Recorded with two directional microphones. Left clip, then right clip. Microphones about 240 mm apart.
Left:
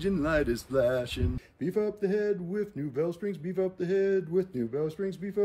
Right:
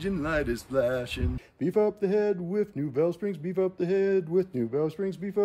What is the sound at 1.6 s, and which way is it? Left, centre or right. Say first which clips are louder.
Speech: right 4 dB; right.